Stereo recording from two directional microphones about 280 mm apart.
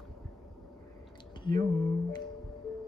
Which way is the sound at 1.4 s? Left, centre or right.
Centre.